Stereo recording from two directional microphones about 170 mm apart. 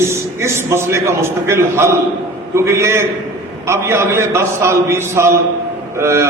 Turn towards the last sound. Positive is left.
turn(degrees=-15)  # may be behind; listen again after turning